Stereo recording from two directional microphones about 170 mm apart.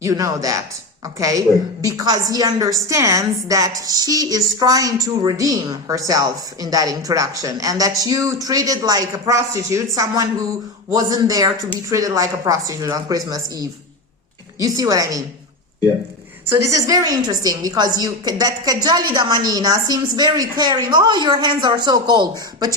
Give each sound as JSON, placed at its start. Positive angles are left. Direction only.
{"t": 0.0, "sound": "a woman's voice", "side_deg": -20}
{"t": 16.5, "sound": "a woman's voice", "side_deg": -20}